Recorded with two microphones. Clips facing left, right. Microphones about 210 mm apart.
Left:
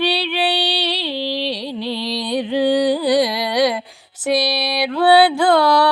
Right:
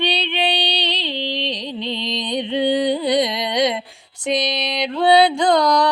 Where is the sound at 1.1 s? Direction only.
10° left (ahead or behind).